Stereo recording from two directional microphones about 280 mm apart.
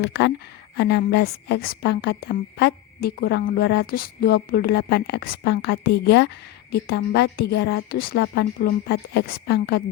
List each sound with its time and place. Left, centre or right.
0.0 s a woman's voice: left